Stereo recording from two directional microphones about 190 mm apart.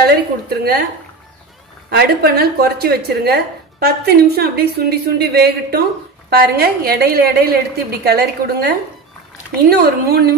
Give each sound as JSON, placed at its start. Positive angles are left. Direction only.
{"t": 0.0, "sound": "a woman's voice", "side_deg": -55}
{"t": 1.9, "sound": "a woman's voice", "side_deg": -55}